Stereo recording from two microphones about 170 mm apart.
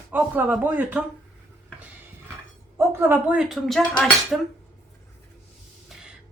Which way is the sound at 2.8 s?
10° right (ahead or behind).